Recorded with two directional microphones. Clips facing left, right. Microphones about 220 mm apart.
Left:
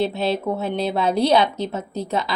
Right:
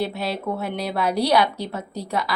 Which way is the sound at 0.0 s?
25° left (ahead or behind).